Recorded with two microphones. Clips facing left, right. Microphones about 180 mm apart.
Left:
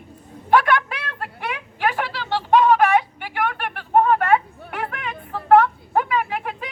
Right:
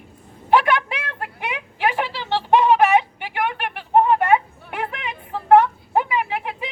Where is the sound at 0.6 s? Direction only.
15° right (ahead or behind).